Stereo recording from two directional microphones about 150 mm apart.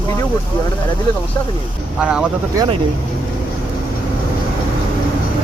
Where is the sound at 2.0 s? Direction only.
5° right (ahead or behind).